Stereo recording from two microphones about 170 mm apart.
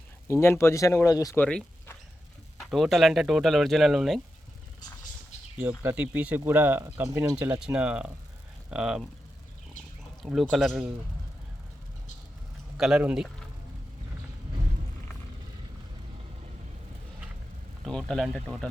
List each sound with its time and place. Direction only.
0.3 s speech: 15° left (ahead or behind)
1.4 s a sound: 10° left (ahead or behind)
2.6 s speech: centre (ahead or behind)
5.8 s speech: 10° right (ahead or behind)
10.2 s speech: centre (ahead or behind)
12.7 s speech: 5° right (ahead or behind)
17.8 s speech: 5° left (ahead or behind)